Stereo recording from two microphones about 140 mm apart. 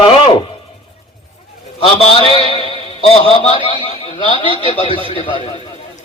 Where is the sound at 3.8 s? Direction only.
40° left (ahead or behind).